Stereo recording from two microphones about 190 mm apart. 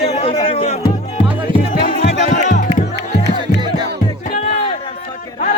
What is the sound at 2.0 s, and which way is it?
Music, 40° left (ahead or behind).